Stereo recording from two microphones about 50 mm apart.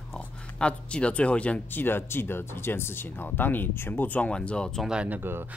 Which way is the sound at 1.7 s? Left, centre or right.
Left.